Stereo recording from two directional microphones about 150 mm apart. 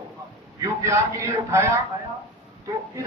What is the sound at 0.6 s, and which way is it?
Speech, 20° right (ahead or behind).